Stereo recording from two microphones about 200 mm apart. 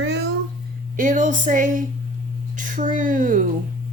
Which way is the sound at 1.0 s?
40° right (ahead or behind).